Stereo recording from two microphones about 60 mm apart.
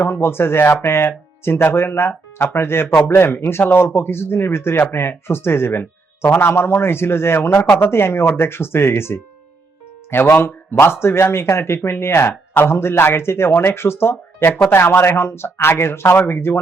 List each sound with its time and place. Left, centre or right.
0.0 s a man's voice: left
10.4 s a man's voice: left